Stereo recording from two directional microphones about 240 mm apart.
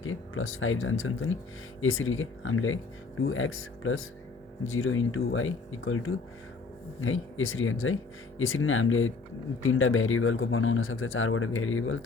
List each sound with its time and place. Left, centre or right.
0.0 s speech: left